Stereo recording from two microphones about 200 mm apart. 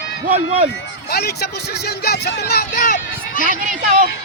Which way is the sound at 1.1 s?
50° left (ahead or behind).